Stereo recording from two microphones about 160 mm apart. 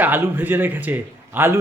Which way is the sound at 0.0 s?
10° right (ahead or behind).